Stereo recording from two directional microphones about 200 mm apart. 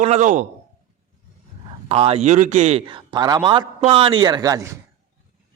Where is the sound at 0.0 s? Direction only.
35° right (ahead or behind).